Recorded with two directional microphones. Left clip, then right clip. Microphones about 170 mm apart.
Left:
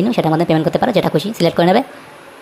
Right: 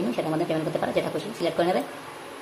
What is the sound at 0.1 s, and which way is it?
Speech, 45° left (ahead or behind).